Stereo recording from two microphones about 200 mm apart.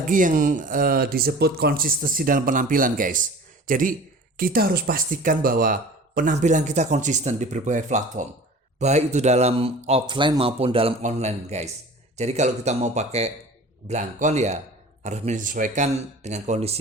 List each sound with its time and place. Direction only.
0.1 s speech: 40° right (ahead or behind)